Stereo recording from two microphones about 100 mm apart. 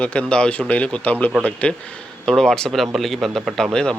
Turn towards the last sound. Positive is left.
turn(degrees=0)  # may be behind; listen again after turning